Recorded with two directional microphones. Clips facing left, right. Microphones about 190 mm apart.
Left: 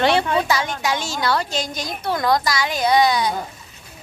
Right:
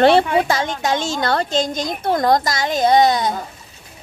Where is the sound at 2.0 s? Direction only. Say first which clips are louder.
Right 3 dB; 50° right (ahead or behind).